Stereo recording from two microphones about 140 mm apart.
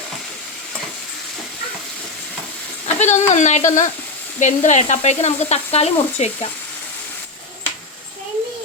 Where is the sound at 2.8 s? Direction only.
55° left (ahead or behind).